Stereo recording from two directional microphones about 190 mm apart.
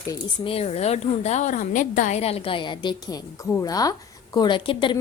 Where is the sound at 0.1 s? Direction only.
30° left (ahead or behind).